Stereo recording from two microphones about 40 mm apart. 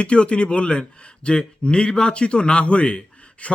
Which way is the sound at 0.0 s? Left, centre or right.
Left.